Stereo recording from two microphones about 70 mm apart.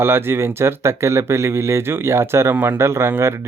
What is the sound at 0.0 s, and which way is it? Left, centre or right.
Speech, right.